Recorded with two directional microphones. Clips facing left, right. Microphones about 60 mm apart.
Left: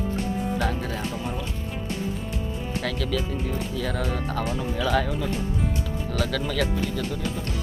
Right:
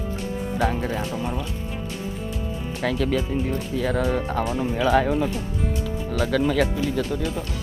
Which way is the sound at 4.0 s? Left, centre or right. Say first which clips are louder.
Right 5 dB; right.